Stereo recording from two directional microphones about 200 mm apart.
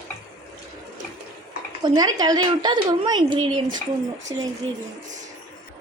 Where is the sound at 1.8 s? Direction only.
20° right (ahead or behind).